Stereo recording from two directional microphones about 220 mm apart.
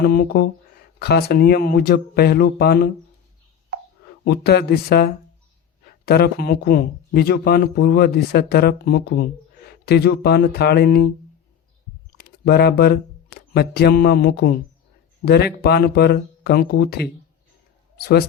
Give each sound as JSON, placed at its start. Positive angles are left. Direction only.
{"t": 0.0, "sound": "speech", "side_deg": 45}
{"t": 4.2, "sound": "speech", "side_deg": 50}
{"t": 12.1, "sound": "speech", "side_deg": 45}
{"t": 17.9, "sound": "a sound", "side_deg": 45}